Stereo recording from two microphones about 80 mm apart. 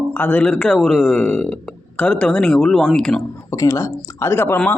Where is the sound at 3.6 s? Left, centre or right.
Left.